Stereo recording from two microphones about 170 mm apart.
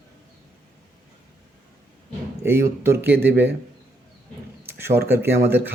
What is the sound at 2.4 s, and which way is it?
Speech, 15° right (ahead or behind).